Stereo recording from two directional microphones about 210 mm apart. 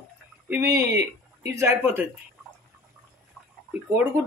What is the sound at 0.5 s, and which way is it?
Speech, 10° right (ahead or behind).